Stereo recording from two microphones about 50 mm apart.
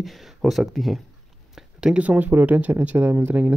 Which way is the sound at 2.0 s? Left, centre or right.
Right.